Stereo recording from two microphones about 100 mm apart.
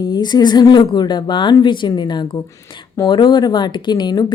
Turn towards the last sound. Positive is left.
turn(degrees=45)  # may be behind; listen again after turning